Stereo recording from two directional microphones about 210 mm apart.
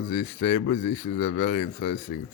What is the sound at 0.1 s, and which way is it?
Speech, 40° left (ahead or behind).